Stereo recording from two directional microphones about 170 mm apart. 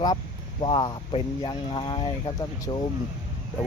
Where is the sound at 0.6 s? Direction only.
25° left (ahead or behind).